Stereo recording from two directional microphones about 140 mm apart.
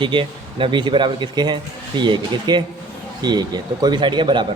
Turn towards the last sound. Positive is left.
turn(degrees=-35)  # may be behind; listen again after turning